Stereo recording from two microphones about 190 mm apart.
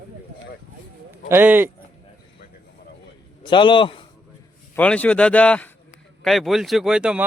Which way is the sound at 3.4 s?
25° left (ahead or behind).